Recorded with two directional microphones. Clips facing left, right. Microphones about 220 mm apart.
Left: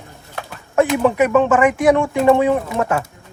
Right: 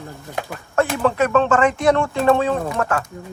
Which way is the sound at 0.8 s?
15° left (ahead or behind).